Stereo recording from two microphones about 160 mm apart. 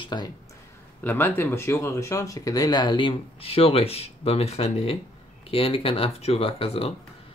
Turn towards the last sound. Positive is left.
turn(degrees=40)  # may be behind; listen again after turning